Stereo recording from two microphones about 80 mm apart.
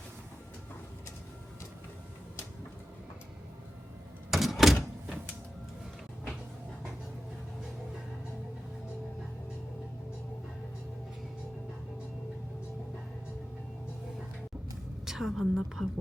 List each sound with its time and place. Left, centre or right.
4.3 s door: centre
15.0 s a woman's voice: centre